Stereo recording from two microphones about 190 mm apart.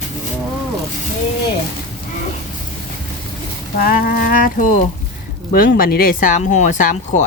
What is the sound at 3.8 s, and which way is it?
Speech, 50° left (ahead or behind).